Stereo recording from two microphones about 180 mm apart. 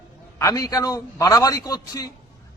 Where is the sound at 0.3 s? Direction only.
20° left (ahead or behind).